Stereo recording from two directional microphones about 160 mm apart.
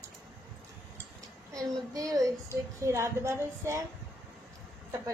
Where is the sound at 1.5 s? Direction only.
20° right (ahead or behind).